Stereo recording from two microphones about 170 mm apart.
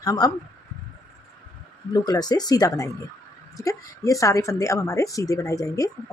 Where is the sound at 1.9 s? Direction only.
20° left (ahead or behind).